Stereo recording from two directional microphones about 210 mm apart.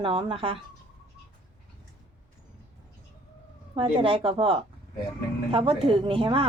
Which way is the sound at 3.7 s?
25° right (ahead or behind).